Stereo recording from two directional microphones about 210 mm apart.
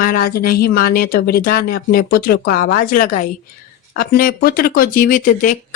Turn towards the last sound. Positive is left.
turn(degrees=40)  # may be behind; listen again after turning